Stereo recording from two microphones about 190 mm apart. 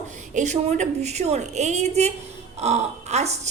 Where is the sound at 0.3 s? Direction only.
40° right (ahead or behind).